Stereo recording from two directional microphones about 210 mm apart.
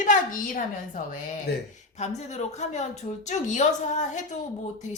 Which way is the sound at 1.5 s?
50° left (ahead or behind).